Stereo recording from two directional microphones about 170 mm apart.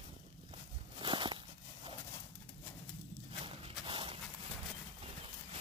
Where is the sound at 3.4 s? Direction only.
35° right (ahead or behind).